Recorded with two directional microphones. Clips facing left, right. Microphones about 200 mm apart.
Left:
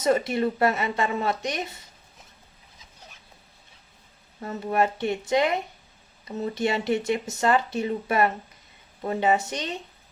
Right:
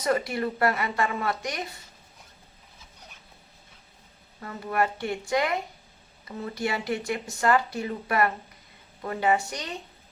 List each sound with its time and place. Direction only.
0.0 s speech: 25° left (ahead or behind)
4.4 s speech: 25° left (ahead or behind)